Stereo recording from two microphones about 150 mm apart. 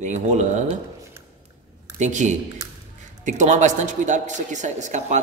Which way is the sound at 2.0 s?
55° right (ahead or behind).